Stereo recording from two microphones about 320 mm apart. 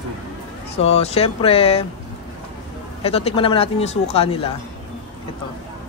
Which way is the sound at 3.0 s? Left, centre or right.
Centre.